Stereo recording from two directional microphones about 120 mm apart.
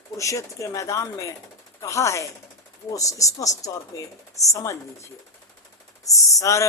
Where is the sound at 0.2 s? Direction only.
25° left (ahead or behind).